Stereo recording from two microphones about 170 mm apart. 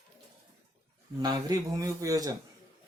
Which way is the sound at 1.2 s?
25° right (ahead or behind).